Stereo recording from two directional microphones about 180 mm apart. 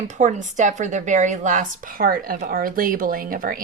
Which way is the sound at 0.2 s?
45° right (ahead or behind).